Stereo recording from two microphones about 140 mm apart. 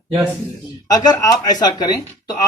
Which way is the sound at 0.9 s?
25° left (ahead or behind).